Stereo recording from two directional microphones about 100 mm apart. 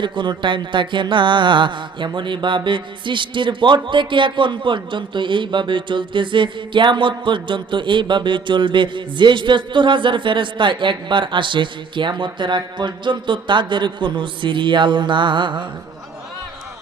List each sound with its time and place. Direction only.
0.0 s a man's voice: 55° right (ahead or behind)